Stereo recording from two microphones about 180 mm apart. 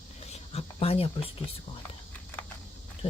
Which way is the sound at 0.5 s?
35° left (ahead or behind).